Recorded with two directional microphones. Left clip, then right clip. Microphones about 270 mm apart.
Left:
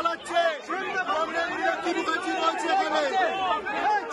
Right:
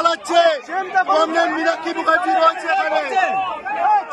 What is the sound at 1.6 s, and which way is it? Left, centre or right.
Speech, centre.